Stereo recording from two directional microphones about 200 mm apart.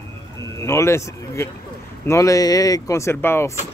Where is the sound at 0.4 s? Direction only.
15° left (ahead or behind).